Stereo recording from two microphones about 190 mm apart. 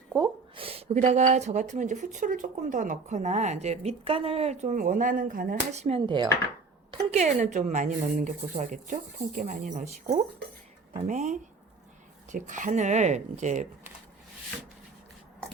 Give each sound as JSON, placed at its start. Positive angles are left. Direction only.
{"t": 0.1, "sound": "speech", "side_deg": -25}